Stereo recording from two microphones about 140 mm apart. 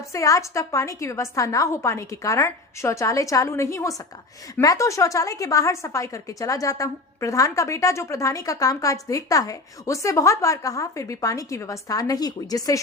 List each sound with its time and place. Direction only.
0.1 s speech: 25° left (ahead or behind)